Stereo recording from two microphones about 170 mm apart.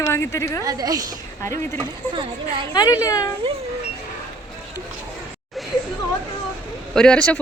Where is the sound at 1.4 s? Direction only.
15° left (ahead or behind).